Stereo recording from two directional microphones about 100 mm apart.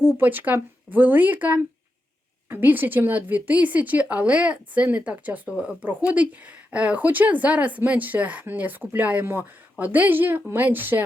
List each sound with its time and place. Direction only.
0.0 s a woman's voice: 20° right (ahead or behind)